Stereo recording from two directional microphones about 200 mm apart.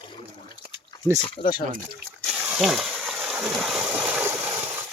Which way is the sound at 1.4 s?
25° left (ahead or behind).